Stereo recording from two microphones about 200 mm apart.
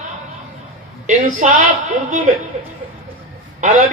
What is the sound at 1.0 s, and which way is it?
Speech, 40° right (ahead or behind).